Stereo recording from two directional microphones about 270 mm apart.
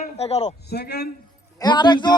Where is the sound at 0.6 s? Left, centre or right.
Left.